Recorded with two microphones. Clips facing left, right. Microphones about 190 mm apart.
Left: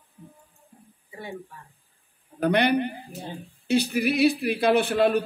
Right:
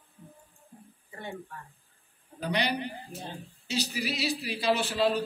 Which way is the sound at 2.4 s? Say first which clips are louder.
Left 9 dB; 55° left (ahead or behind).